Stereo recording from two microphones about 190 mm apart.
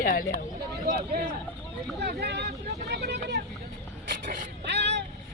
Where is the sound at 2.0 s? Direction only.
60° right (ahead or behind).